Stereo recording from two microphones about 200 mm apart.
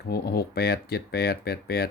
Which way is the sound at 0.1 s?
50° left (ahead or behind).